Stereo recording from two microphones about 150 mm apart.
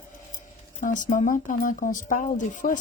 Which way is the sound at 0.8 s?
60° left (ahead or behind).